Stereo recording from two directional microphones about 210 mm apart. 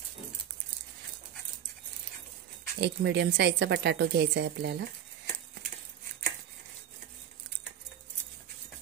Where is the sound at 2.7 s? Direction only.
55° right (ahead or behind).